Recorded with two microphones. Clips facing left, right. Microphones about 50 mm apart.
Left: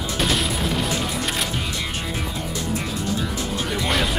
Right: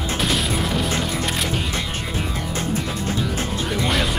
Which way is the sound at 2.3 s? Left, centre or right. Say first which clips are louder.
Right 2 dB; right.